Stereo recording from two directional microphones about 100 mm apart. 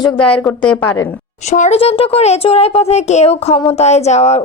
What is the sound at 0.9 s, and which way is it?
Speech, 25° left (ahead or behind).